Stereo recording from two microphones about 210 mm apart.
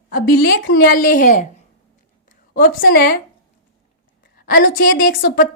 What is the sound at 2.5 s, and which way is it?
Speech, 45° left (ahead or behind).